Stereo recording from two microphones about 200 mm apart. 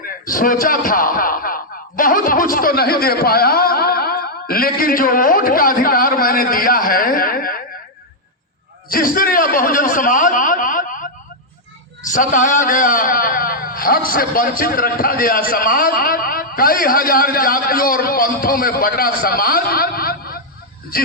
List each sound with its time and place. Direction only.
0.3 s a man's voice: 45° left (ahead or behind)
8.9 s a man's voice: 45° left (ahead or behind)
12.1 s a man's voice: 40° left (ahead or behind)